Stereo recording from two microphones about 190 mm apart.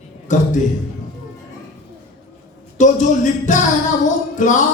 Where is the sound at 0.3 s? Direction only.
40° left (ahead or behind).